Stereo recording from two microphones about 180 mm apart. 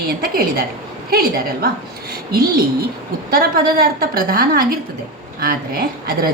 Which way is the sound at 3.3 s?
55° right (ahead or behind).